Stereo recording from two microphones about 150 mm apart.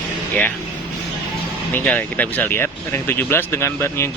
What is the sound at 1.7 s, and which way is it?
Speech, 10° left (ahead or behind).